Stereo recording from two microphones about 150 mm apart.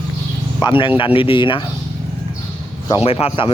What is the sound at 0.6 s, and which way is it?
Speech, 35° left (ahead or behind).